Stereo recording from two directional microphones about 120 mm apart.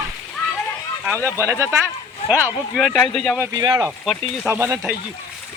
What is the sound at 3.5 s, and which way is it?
Speech, 35° right (ahead or behind).